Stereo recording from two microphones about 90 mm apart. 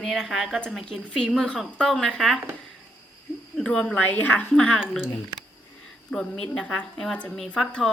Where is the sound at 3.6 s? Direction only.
10° left (ahead or behind).